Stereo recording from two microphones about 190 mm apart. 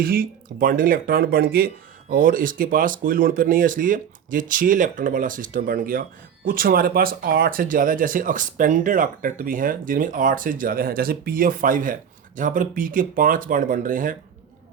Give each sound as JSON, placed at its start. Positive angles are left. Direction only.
{"t": 0.0, "sound": "speech", "side_deg": -50}